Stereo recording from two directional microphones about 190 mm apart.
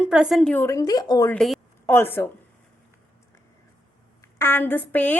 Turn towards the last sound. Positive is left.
turn(degrees=10)  # may be behind; listen again after turning